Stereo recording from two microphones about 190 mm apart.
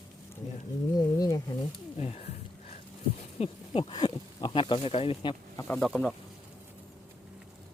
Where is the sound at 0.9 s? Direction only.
20° left (ahead or behind).